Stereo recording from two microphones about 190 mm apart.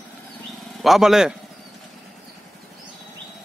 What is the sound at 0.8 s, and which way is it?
Speech, centre (ahead or behind).